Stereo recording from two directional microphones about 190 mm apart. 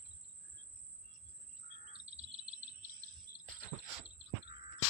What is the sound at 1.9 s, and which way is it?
Chirp, 35° right (ahead or behind).